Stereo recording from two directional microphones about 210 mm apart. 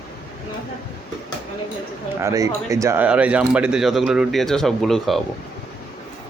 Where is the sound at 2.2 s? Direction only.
15° right (ahead or behind); by 5.2 s centre (ahead or behind).